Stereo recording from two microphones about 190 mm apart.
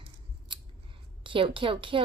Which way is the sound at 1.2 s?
25° right (ahead or behind).